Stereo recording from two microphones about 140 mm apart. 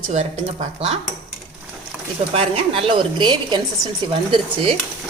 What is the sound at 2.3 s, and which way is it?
A woman's voice, 40° right (ahead or behind).